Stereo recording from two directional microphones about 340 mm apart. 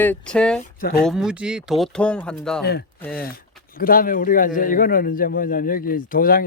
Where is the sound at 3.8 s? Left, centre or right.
Left.